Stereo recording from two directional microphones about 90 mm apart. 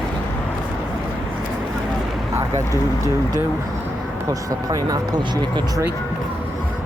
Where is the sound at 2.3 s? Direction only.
35° right (ahead or behind).